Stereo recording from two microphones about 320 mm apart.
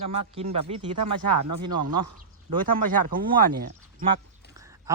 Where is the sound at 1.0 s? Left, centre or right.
Right.